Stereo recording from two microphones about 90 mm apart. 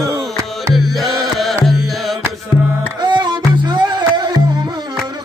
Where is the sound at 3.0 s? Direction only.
55° right (ahead or behind).